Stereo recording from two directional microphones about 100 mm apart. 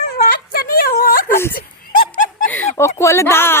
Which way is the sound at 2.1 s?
15° left (ahead or behind).